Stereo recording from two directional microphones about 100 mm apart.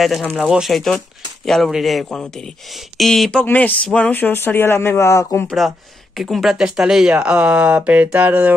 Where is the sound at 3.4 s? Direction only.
15° left (ahead or behind).